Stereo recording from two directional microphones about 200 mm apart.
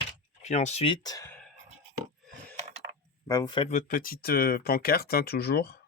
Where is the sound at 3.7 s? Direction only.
45° left (ahead or behind).